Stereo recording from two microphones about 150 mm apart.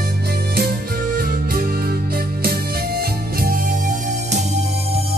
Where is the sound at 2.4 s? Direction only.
90° right; by 4.6 s 55° right (ahead or behind).